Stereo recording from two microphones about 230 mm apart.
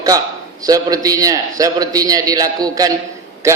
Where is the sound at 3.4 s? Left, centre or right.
Centre.